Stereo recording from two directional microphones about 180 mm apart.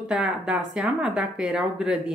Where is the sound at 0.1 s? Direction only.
5° right (ahead or behind).